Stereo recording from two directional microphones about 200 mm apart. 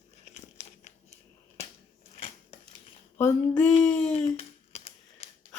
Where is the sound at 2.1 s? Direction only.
30° left (ahead or behind).